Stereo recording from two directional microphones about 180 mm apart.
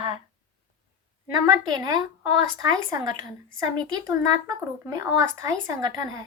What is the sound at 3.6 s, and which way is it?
Speech, 20° right (ahead or behind).